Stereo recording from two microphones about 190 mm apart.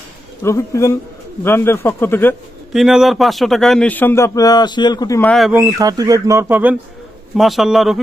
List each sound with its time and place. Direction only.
0.4 s speech: 15° left (ahead or behind)
2.7 s speech: centre (ahead or behind); by 5.3 s 15° left (ahead or behind)
5.3 s a man's voice: centre (ahead or behind)
5.5 s a man's voice: 20° right (ahead or behind); by 7.9 s centre (ahead or behind)